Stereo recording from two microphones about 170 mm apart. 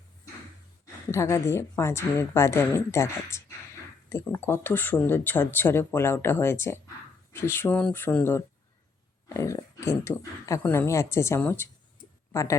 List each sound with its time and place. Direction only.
1.1 s speech: 15° left (ahead or behind)